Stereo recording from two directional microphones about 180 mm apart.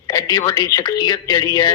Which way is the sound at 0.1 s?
20° left (ahead or behind).